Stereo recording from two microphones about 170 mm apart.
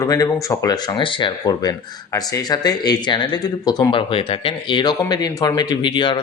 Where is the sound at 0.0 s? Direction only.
20° left (ahead or behind).